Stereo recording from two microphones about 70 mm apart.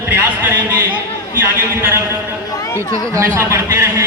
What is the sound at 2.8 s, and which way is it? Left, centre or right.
Speech, right.